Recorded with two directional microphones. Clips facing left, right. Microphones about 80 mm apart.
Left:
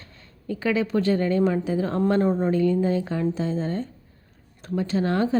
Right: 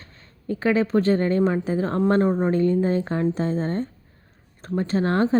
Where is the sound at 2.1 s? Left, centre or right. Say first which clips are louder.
Right 2 dB; right.